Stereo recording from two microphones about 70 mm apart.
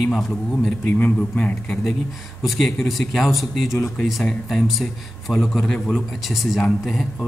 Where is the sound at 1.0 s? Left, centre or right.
Left.